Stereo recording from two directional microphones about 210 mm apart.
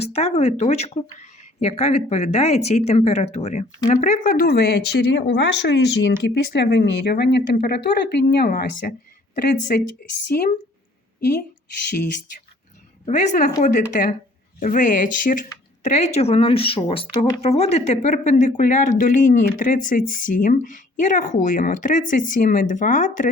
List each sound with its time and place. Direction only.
0.0 s speech: 30° left (ahead or behind)
11.2 s speech: 50° left (ahead or behind)
13.1 s speech: 35° left (ahead or behind)